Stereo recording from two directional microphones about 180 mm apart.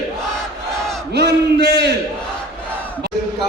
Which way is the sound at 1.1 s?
70° right (ahead or behind).